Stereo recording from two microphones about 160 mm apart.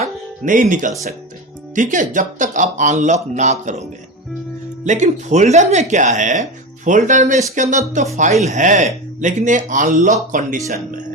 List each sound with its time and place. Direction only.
0.0 s music: 55° right (ahead or behind)
1.7 s speech: 50° right (ahead or behind)
4.9 s speech: 50° right (ahead or behind)